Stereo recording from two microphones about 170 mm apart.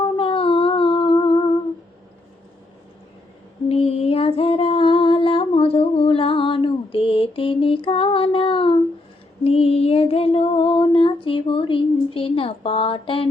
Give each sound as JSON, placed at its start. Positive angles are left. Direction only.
{"t": 0.2, "sound": "humming", "side_deg": 35}
{"t": 3.7, "sound": "music", "side_deg": 35}
{"t": 9.4, "sound": "a sound", "side_deg": 35}